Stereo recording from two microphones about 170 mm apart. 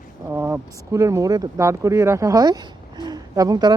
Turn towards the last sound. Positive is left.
turn(degrees=-25)  # may be behind; listen again after turning